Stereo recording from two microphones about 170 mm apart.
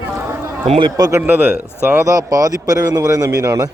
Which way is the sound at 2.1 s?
20° right (ahead or behind).